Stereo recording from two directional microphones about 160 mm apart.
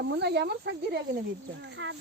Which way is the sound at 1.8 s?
90° right.